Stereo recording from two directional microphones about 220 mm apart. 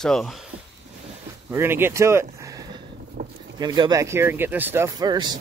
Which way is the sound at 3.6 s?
20° right (ahead or behind).